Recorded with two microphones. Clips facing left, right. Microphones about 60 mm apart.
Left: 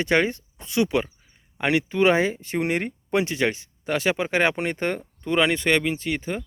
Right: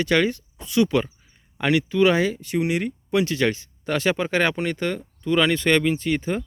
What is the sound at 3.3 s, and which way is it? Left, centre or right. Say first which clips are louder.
Speech: right 2 dB; centre.